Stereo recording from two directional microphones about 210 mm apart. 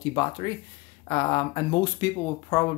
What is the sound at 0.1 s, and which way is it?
Speech, 20° left (ahead or behind).